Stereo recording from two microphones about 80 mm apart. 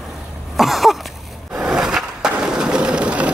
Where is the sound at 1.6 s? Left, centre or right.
Centre.